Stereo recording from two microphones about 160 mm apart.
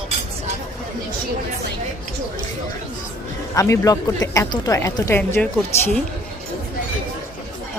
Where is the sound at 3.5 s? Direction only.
20° left (ahead or behind).